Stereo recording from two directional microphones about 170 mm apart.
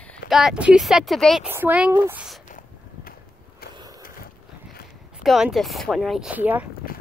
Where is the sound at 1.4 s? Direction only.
10° right (ahead or behind).